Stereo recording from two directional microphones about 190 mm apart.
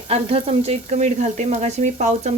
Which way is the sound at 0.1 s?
30° right (ahead or behind).